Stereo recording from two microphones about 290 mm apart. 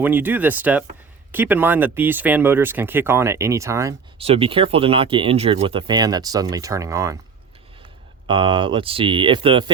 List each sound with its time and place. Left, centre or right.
0.0 s speech: centre
8.3 s speech: centre